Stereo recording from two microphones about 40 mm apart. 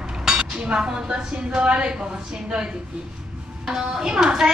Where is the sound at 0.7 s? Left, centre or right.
Right.